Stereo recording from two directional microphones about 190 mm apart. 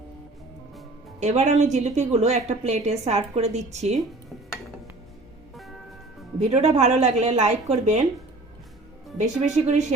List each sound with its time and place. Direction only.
1.2 s a woman's voice: 35° right (ahead or behind)
6.5 s a woman's voice: 35° right (ahead or behind)
9.1 s a woman's voice: 40° right (ahead or behind)